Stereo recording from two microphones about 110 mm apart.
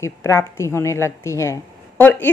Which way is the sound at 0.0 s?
25° left (ahead or behind).